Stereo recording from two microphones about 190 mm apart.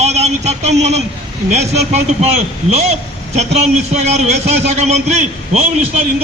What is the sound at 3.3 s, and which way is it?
A man's voice, 35° right (ahead or behind).